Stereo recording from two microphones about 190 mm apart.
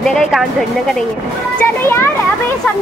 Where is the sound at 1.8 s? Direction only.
10° left (ahead or behind).